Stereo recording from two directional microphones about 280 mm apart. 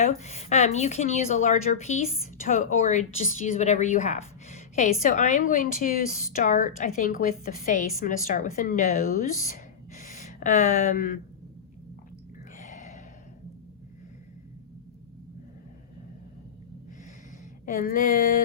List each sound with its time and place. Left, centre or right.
0.0 s speech: left
12.5 s a sound: left
17.7 s speech: left